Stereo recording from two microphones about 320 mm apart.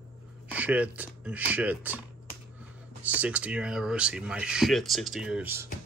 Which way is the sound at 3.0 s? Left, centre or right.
Centre.